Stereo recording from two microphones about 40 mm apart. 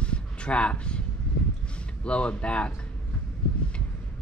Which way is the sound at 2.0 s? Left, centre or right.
Left.